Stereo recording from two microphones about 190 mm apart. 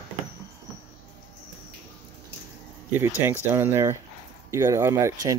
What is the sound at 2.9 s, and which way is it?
Speech, 10° right (ahead or behind).